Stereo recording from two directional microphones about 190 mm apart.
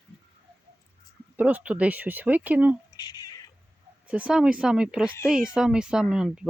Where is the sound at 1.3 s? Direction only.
5° right (ahead or behind).